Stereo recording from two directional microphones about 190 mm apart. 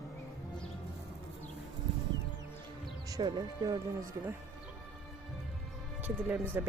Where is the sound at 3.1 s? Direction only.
20° right (ahead or behind).